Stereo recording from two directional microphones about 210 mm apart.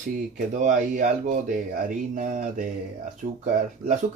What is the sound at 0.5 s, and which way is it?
Speech, 35° right (ahead or behind).